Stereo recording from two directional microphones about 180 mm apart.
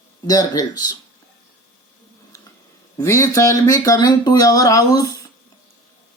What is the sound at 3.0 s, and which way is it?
Speech, 15° left (ahead or behind).